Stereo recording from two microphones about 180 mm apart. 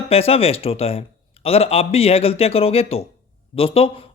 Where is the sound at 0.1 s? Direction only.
35° left (ahead or behind).